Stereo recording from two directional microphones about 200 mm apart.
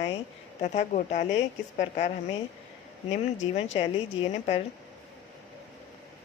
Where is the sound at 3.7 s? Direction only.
30° left (ahead or behind).